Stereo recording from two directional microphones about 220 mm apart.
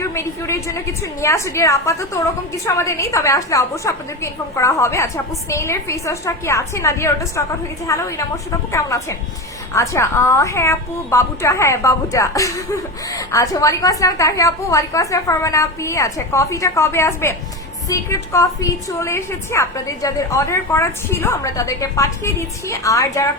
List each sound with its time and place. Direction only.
0.0 s a woman's voice: 10° left (ahead or behind)